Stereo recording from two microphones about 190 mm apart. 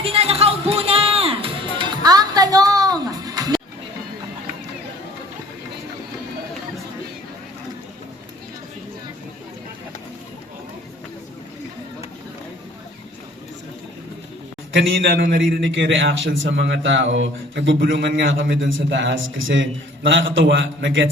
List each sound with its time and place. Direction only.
0.0 s music: 30° right (ahead or behind)
14.7 s a man's voice: 80° right